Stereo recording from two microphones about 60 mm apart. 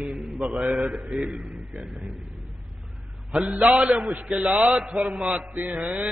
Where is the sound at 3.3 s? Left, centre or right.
Centre.